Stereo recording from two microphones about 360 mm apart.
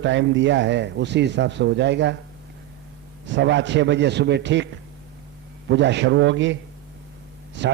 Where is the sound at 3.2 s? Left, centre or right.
Right.